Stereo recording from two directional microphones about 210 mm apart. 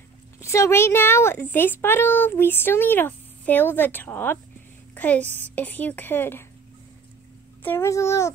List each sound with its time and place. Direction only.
0.4 s a child's voice: 15° left (ahead or behind)
7.6 s a child's voice: 10° left (ahead or behind)